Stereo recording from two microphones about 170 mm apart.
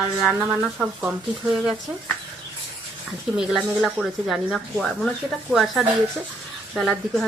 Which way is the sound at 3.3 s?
5° right (ahead or behind).